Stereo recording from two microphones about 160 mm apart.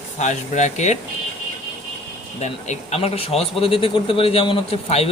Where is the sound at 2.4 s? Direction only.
45° left (ahead or behind).